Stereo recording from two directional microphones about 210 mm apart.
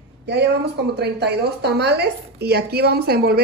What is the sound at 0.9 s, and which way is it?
Speech, 50° right (ahead or behind).